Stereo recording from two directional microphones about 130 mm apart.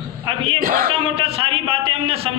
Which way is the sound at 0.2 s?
40° right (ahead or behind).